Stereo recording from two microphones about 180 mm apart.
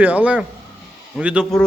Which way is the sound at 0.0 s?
10° right (ahead or behind).